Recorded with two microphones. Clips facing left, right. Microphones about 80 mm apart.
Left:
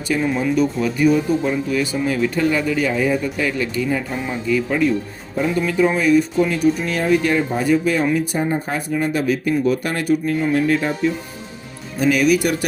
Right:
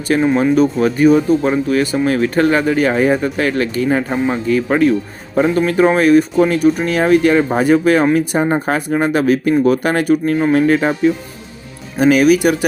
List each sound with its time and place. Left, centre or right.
0.1 s speech: right
0.5 s speech: right
5.3 s speech: right
10.5 s speech: right
11.9 s speech: right